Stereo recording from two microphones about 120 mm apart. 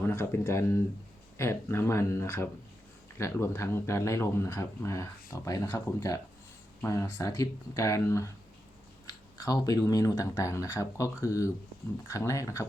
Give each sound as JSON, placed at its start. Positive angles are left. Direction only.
{"t": 0.0, "sound": "speech", "side_deg": 20}
{"t": 9.4, "sound": "speech", "side_deg": 30}